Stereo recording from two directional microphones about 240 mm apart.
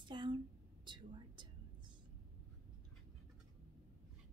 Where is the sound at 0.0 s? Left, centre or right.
Centre.